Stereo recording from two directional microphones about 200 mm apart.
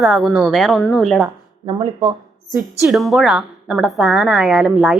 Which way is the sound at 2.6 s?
Centre (ahead or behind).